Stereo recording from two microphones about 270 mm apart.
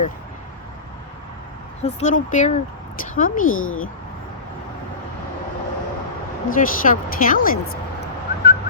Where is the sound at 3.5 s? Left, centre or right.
Left.